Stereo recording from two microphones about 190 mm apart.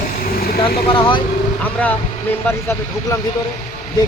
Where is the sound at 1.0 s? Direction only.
25° left (ahead or behind).